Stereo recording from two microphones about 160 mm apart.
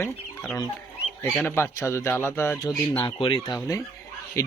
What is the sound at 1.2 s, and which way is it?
Speech, 15° left (ahead or behind).